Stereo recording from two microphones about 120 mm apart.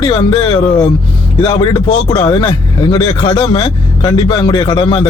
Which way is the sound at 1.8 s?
50° left (ahead or behind).